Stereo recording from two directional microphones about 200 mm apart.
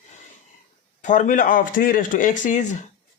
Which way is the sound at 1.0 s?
40° left (ahead or behind).